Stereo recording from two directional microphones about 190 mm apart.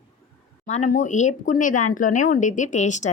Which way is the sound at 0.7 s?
40° left (ahead or behind).